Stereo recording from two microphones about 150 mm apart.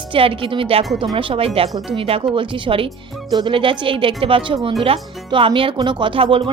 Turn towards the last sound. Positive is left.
turn(degrees=-35)  # may be behind; listen again after turning